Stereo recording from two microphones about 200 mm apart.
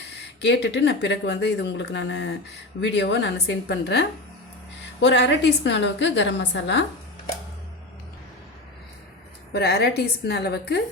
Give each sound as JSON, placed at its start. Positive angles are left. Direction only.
{"t": 0.0, "sound": "speech", "side_deg": 60}
{"t": 9.5, "sound": "speech", "side_deg": 55}